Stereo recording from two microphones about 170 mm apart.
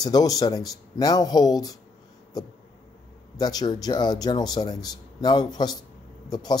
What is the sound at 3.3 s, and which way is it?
Speech, 25° left (ahead or behind).